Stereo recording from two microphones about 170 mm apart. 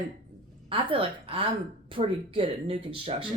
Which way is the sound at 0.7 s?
30° right (ahead or behind).